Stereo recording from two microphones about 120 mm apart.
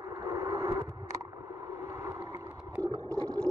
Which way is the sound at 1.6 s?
25° right (ahead or behind).